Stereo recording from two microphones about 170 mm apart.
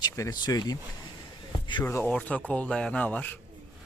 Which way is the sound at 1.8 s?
10° left (ahead or behind).